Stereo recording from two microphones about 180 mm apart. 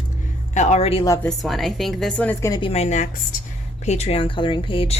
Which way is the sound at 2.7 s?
40° left (ahead or behind).